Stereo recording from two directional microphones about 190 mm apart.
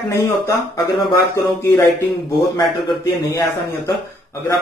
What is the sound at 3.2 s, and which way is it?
Speech, 20° left (ahead or behind).